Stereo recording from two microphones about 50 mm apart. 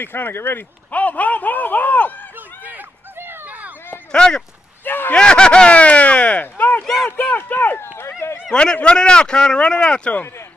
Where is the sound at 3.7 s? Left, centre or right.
Left.